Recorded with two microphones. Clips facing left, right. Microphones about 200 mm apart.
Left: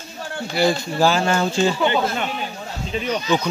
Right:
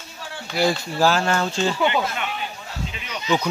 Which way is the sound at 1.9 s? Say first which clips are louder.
Left 3 dB; 35° left (ahead or behind).